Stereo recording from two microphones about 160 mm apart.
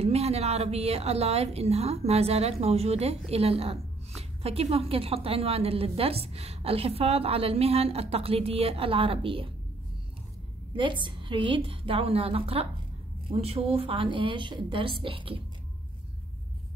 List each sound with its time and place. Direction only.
0.0 s a woman's voice: 40° right (ahead or behind)
10.8 s a woman's voice: 30° right (ahead or behind)